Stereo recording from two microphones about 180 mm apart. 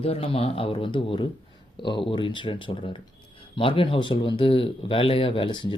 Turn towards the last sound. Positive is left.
turn(degrees=25)  # may be behind; listen again after turning